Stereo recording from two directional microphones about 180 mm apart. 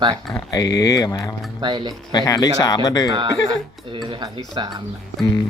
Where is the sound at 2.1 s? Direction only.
20° left (ahead or behind).